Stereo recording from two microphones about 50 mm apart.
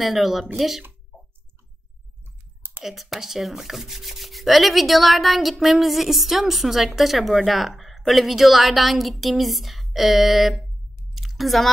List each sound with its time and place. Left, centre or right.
0.0 s speech: centre
2.2 s clicking: right
2.8 s speech: centre
11.1 s a sound: centre